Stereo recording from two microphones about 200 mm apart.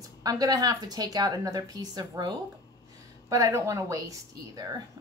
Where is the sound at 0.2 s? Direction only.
20° right (ahead or behind).